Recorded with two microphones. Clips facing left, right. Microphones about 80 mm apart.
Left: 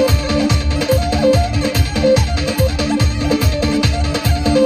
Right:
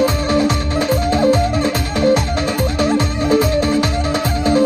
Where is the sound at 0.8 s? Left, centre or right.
Centre.